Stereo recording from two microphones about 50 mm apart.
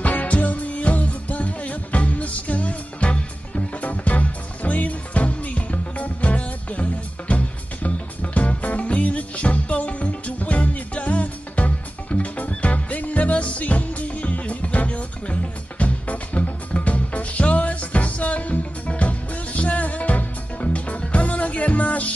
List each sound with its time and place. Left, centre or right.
0.0 s music: left